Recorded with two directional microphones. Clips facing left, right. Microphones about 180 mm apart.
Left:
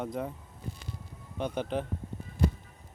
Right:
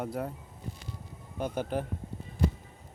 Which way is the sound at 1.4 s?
10° right (ahead or behind).